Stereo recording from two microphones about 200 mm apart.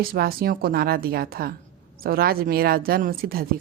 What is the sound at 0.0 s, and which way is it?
Speech, 50° right (ahead or behind).